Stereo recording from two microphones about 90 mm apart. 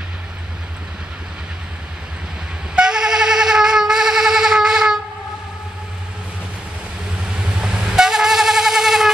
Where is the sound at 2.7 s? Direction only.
10° right (ahead or behind).